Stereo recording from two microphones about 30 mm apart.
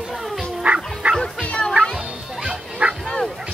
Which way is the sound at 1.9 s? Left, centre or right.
Right.